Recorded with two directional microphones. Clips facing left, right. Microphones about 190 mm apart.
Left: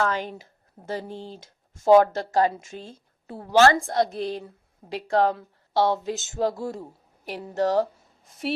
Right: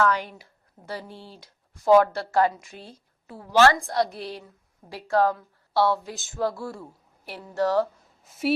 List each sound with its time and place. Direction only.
0.0 s a woman's voice: 25° left (ahead or behind)
0.9 s speech: 45° left (ahead or behind)
1.8 s a woman's voice: 20° left (ahead or behind)
8.2 s a woman's voice: 5° right (ahead or behind)